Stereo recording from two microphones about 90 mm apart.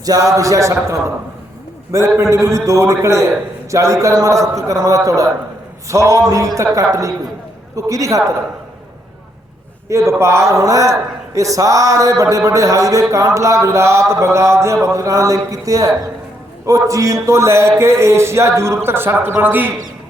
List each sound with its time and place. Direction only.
0.0 s a man's voice: 40° right (ahead or behind)
9.9 s a man's voice: 30° right (ahead or behind)